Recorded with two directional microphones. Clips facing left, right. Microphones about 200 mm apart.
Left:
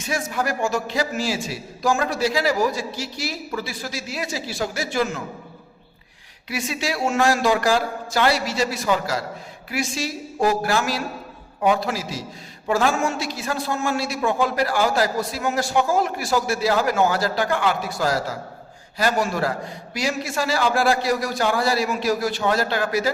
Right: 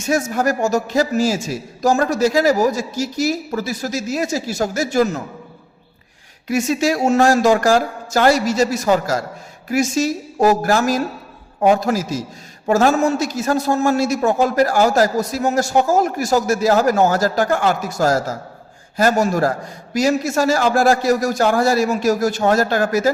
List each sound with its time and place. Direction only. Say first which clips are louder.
0.0 s a man's voice: right 7 dB; 45° right (ahead or behind)
6.5 s a man's voice: right 9 dB; 45° right (ahead or behind)